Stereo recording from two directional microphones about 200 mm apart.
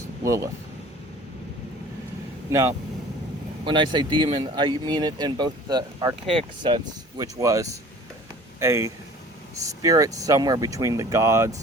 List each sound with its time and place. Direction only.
0.2 s speech: 15° right (ahead or behind)
2.5 s speech: 15° right (ahead or behind)